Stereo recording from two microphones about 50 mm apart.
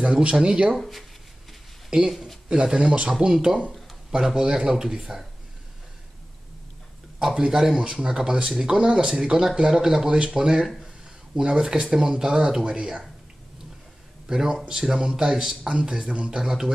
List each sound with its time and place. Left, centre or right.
0.0 s speech: right
0.7 s speech: centre
1.9 s speech: centre
7.2 s speech: centre
14.2 s speech: centre